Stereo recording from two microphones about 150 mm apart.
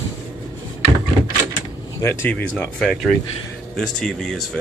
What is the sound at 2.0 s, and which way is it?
Speech, 15° left (ahead or behind).